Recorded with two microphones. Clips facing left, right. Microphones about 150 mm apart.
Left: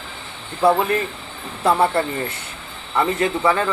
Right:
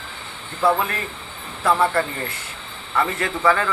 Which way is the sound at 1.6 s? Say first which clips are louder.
Left 2 dB; 25° left (ahead or behind).